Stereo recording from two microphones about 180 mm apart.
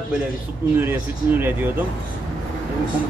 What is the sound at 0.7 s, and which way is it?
Speech, 10° right (ahead or behind).